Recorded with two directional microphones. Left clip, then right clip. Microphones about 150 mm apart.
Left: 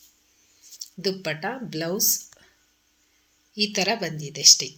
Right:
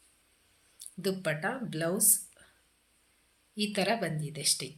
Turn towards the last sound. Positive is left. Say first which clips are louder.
# left 15 dB
turn(degrees=20)  # may be behind; listen again after turning